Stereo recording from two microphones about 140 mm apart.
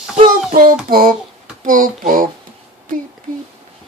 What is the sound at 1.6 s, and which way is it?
Speech, 75° right (ahead or behind).